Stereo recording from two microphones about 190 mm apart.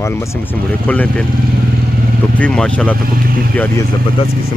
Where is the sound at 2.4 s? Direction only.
5° left (ahead or behind).